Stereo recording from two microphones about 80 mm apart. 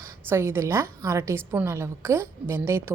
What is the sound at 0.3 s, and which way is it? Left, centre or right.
A woman's voice, right.